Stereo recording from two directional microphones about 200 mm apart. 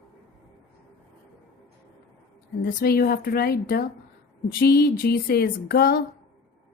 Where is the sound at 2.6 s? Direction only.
45° left (ahead or behind).